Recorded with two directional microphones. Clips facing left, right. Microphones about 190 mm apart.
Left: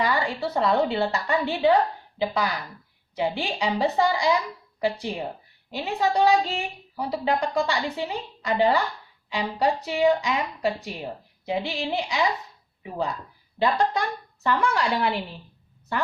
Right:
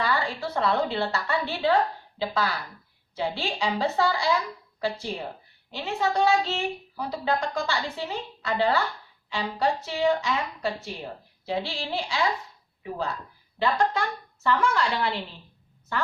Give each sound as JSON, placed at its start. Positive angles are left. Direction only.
{"t": 0.0, "sound": "a sound", "side_deg": 15}
{"t": 0.4, "sound": "a woman's voice", "side_deg": 15}
{"t": 13.9, "sound": "a woman's voice", "side_deg": 15}